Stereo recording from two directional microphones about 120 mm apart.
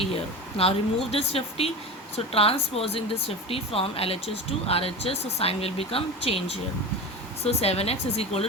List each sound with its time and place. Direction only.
0.0 s speech: 55° left (ahead or behind)